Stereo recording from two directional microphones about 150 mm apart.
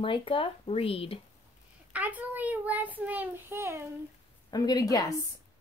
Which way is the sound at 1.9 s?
10° right (ahead or behind).